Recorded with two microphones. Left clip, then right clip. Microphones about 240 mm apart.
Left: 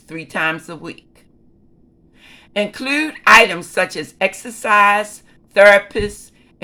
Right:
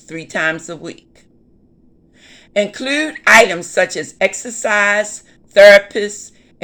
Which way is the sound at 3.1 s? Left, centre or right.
Centre.